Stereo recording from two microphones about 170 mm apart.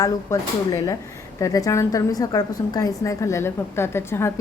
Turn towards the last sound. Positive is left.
turn(degrees=15)  # may be behind; listen again after turning